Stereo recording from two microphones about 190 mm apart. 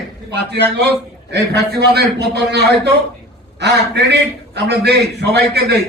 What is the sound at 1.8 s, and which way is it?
A man's voice, 60° right (ahead or behind).